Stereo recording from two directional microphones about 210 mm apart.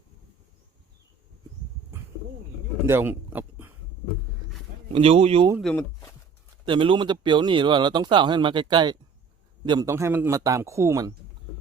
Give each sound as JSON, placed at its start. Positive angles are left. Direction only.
{"t": 2.8, "sound": "a sound", "side_deg": -10}
{"t": 4.9, "sound": "speech", "side_deg": -25}
{"t": 5.5, "sound": "speech", "side_deg": 0}
{"t": 6.7, "sound": "a man's voice", "side_deg": -25}